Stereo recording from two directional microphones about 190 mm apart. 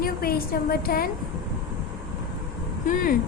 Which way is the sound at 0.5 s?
50° left (ahead or behind).